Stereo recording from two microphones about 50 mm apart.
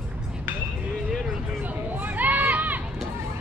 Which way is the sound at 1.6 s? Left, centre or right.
Right.